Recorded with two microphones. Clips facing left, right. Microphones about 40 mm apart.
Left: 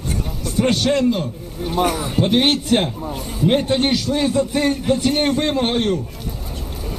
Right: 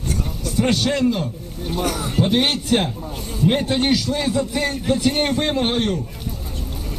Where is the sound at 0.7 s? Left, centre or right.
Left.